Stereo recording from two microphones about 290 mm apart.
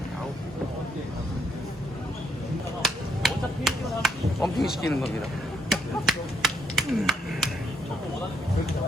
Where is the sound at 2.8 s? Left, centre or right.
Centre.